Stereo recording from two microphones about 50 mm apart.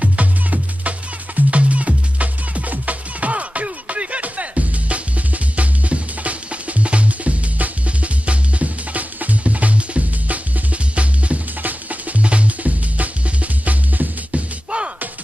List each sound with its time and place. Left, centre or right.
0.0 s music: right